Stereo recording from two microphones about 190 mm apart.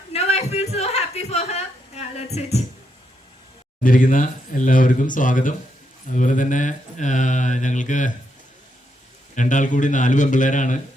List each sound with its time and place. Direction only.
0.1 s a sound: 35° left (ahead or behind)
3.8 s speech: 45° left (ahead or behind)
6.1 s mantra: 40° left (ahead or behind)
9.3 s mantra: 40° left (ahead or behind)